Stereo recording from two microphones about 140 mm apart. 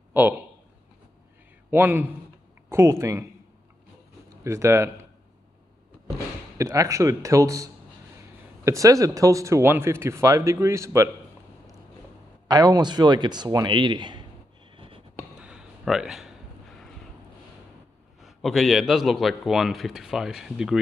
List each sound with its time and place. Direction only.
0.1 s a man's voice: 15° right (ahead or behind)
1.7 s a man's voice: 15° right (ahead or behind)
4.4 s speech: 20° right (ahead or behind)
6.6 s speech: 25° right (ahead or behind)
12.4 s speech: 30° right (ahead or behind)
15.4 s a sound: 5° right (ahead or behind)
18.2 s a man's voice: centre (ahead or behind)